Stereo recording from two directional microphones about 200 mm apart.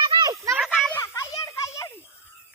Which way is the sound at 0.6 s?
Centre (ahead or behind).